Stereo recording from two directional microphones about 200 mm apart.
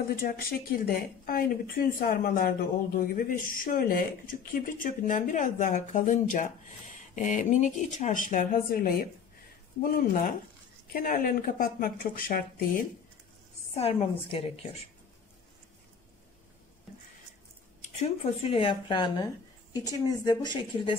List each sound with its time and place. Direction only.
0.1 s speech: 50° left (ahead or behind)
10.9 s speech: 45° left (ahead or behind)
13.7 s speech: 30° left (ahead or behind)
17.9 s speech: 30° left (ahead or behind)